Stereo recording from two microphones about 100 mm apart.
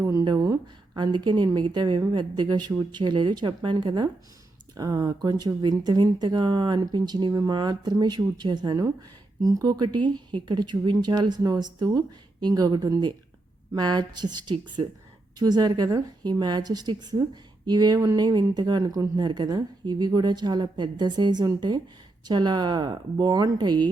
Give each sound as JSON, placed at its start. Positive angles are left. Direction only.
{"t": 0.0, "sound": "speech", "side_deg": -40}